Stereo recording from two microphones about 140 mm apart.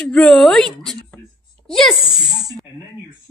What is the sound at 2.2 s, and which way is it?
Speech, 25° right (ahead or behind).